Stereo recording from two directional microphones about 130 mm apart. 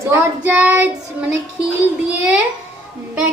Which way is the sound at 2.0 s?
5° right (ahead or behind).